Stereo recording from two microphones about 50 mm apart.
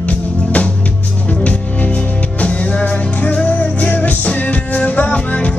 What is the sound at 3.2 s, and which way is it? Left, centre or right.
Music, left.